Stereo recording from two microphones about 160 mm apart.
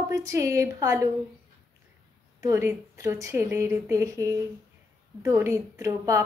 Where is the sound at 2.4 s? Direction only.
15° right (ahead or behind).